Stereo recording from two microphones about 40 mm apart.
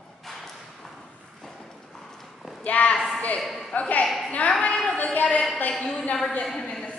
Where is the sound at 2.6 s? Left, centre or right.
Left.